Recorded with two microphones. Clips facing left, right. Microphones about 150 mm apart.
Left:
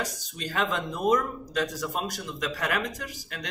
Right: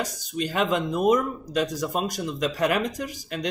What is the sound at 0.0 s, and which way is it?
Speech, 15° right (ahead or behind).